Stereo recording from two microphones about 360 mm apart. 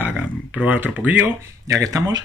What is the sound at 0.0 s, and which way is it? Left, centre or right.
Speech, centre.